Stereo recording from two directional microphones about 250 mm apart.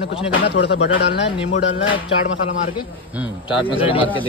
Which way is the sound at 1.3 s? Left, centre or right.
Left.